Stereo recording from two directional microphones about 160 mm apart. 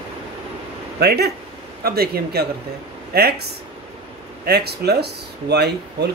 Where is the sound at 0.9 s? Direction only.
90° right.